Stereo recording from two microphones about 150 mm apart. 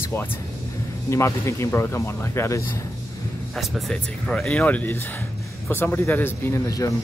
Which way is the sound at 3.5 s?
Centre (ahead or behind).